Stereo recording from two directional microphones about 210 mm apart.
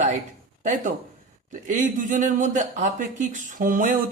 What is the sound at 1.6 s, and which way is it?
Speech, 35° right (ahead or behind).